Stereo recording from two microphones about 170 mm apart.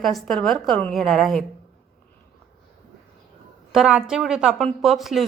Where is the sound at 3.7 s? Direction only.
5° right (ahead or behind).